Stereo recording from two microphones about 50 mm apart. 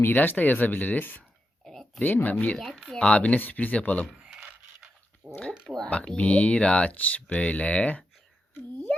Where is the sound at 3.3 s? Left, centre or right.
Left.